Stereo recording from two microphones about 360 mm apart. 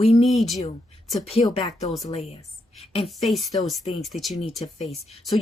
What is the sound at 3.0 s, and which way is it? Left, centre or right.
Speech, centre.